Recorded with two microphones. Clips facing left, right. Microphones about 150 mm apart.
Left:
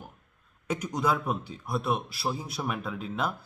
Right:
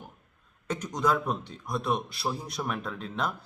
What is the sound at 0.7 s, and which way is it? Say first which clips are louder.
A man's voice: even; 10° left (ahead or behind).